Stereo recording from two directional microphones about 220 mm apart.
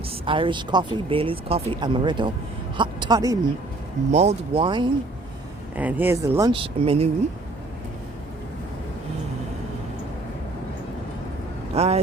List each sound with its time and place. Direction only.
0.3 s speech: 25° right (ahead or behind)
4.1 s speech: 30° right (ahead or behind)
5.7 s speech: 10° right (ahead or behind); by 7.1 s 25° right (ahead or behind)
11.7 s speech: 30° right (ahead or behind)